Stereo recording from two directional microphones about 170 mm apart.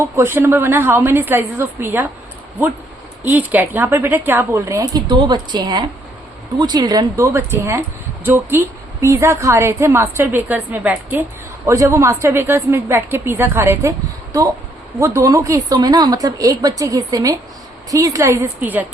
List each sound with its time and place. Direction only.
0.0 s a woman's voice: 15° right (ahead or behind)
3.2 s a woman's voice: 10° right (ahead or behind)